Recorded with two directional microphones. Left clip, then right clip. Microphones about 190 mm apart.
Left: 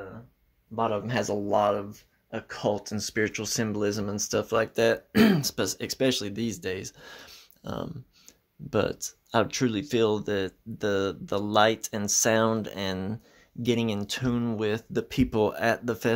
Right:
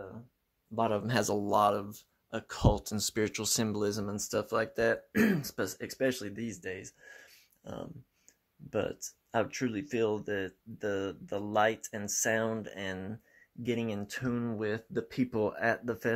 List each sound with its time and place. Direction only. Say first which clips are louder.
0.7 s speech: left 3 dB; 45° right (ahead or behind); by 4.0 s 20° right (ahead or behind)
4.0 s speech: left 5 dB; 10° right (ahead or behind)
4.7 s speech: left 6 dB; 5° left (ahead or behind)
6.6 s speech: left 8 dB; 20° left (ahead or behind)
9.3 s speech: left 7 dB; 10° left (ahead or behind)